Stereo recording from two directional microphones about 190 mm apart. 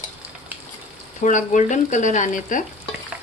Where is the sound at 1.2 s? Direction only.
40° left (ahead or behind).